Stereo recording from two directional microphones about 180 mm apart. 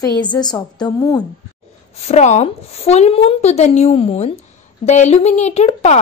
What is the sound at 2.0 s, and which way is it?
A woman's voice, 40° left (ahead or behind).